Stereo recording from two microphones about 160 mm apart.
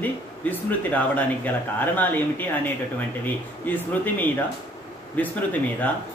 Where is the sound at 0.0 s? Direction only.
10° left (ahead or behind).